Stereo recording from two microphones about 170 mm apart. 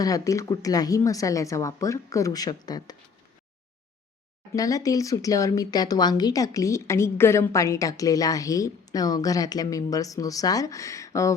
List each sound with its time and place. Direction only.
0.0 s speech: 20° left (ahead or behind)
4.5 s speech: 20° left (ahead or behind)